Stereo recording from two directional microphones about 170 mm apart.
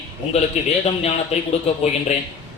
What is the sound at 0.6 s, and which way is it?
Speech, 40° left (ahead or behind).